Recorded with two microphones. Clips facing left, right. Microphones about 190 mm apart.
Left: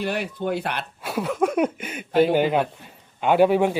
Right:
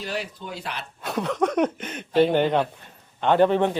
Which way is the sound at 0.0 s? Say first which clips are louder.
Left 6 dB; 60° left (ahead or behind).